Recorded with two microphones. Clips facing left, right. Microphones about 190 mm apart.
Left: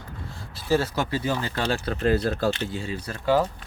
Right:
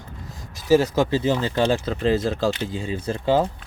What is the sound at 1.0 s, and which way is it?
Speech, 25° right (ahead or behind).